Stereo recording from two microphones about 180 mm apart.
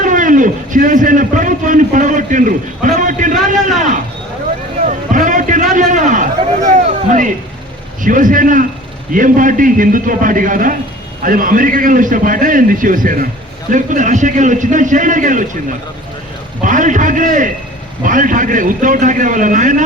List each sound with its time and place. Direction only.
0.0 s a sound: 45° right (ahead or behind)
8.0 s a man's voice: 50° right (ahead or behind)
16.6 s a man's voice: 45° right (ahead or behind)